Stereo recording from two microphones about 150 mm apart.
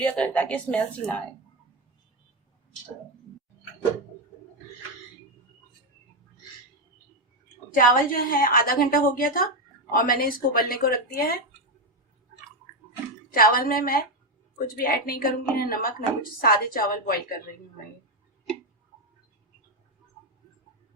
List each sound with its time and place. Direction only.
0.0 s a woman's voice: 10° left (ahead or behind)
8.1 s a woman's voice: 75° left (ahead or behind)
13.3 s a woman's voice: 75° left (ahead or behind)